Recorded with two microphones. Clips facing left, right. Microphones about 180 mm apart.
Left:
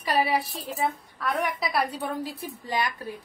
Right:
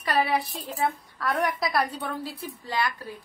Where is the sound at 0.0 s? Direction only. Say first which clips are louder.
Even; 10° left (ahead or behind).